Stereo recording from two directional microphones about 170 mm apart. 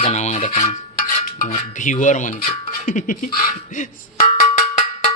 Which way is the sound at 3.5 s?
50° left (ahead or behind).